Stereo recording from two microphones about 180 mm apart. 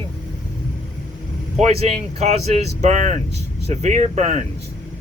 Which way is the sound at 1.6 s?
35° right (ahead or behind).